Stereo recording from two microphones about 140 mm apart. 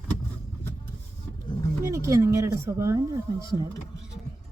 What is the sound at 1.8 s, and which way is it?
Speech, 20° right (ahead or behind).